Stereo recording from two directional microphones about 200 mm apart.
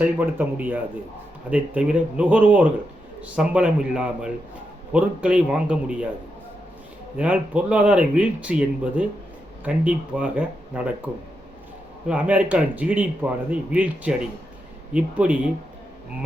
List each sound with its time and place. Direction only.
0.0 s speech: 10° right (ahead or behind)
7.2 s speech: 5° right (ahead or behind)